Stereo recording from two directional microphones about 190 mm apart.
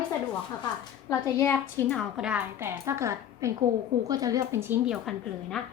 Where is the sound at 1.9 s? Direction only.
Centre (ahead or behind).